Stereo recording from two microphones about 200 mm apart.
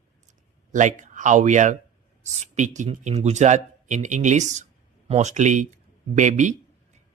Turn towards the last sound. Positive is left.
turn(degrees=-35)  # may be behind; listen again after turning